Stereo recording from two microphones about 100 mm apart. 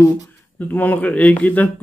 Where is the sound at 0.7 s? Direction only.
15° left (ahead or behind).